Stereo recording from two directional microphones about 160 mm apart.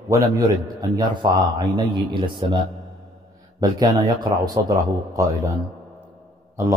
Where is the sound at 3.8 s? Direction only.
25° right (ahead or behind).